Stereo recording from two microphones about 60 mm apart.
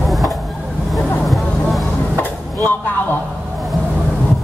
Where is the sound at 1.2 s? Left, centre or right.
Centre.